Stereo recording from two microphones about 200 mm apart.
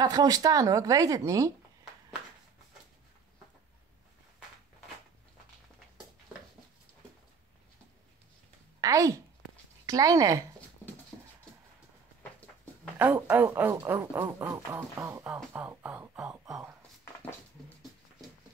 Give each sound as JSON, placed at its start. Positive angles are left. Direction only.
{"t": 0.0, "sound": "speech", "side_deg": -20}
{"t": 8.8, "sound": "speech", "side_deg": -15}
{"t": 11.1, "sound": "dog", "side_deg": 20}
{"t": 13.0, "sound": "speech", "side_deg": -10}